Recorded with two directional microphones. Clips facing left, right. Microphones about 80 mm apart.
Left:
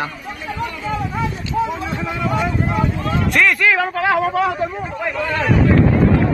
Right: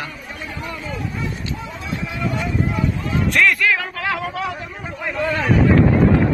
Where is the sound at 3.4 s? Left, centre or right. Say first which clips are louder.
Left 2 dB; left.